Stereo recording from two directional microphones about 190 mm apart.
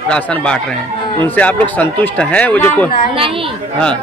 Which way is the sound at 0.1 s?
5° left (ahead or behind).